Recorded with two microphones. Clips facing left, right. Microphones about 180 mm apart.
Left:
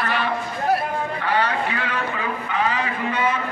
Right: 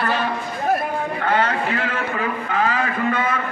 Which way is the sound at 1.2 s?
45° right (ahead or behind).